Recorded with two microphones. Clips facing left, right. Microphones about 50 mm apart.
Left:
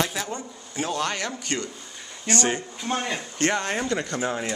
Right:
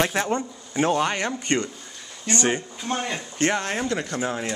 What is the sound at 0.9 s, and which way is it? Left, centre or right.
Speech, right.